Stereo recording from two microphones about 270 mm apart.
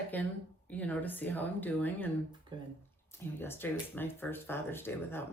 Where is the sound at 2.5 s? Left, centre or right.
Centre.